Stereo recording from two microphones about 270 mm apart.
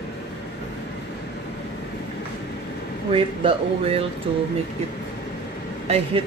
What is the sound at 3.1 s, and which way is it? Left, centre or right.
Speech, right.